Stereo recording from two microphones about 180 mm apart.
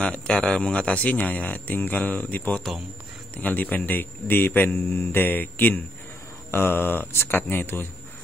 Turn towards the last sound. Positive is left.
turn(degrees=10)  # may be behind; listen again after turning